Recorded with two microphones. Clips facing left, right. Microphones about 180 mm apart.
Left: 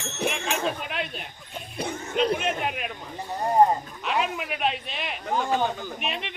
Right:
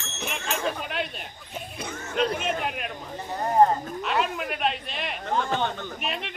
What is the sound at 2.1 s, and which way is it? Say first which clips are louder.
Speech: left 1 dB; centre (ahead or behind).